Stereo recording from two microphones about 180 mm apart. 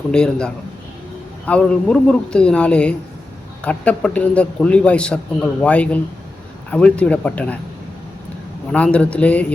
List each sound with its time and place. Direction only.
0.1 s a man's voice: 5° left (ahead or behind)
8.7 s a man's voice: 5° left (ahead or behind)